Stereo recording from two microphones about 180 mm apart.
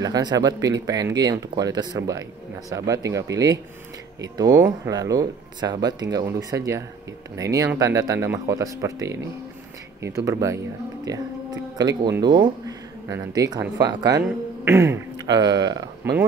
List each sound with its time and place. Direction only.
0.0 s speech: 20° right (ahead or behind)
11.1 s a sound: 20° right (ahead or behind)
12.1 s speech: 25° right (ahead or behind)